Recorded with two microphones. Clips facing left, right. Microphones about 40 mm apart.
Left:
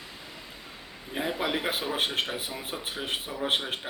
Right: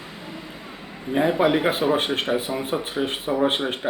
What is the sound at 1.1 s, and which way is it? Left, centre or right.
Speech, centre.